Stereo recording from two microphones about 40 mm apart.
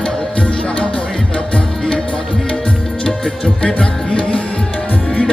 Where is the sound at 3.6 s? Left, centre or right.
Left.